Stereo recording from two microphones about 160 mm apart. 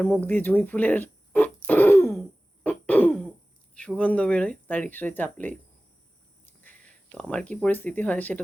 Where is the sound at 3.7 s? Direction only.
5° left (ahead or behind).